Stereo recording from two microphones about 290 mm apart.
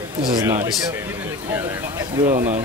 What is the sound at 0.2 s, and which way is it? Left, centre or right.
A man's voice, centre.